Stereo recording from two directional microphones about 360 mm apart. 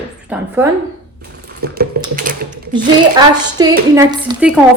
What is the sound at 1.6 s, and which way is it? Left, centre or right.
Typing, right.